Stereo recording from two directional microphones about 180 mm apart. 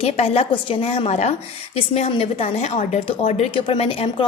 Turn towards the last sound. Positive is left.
turn(degrees=30)  # may be behind; listen again after turning